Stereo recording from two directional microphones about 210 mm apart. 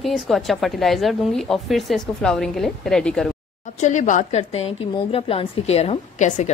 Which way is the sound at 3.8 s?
35° left (ahead or behind).